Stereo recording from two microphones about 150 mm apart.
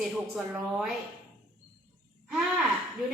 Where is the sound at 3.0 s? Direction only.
Centre (ahead or behind).